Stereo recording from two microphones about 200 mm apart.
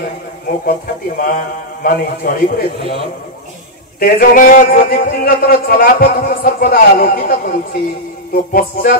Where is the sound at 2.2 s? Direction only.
40° left (ahead or behind).